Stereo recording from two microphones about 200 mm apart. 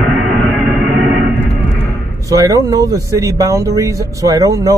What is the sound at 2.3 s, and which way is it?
Speech, 15° right (ahead or behind).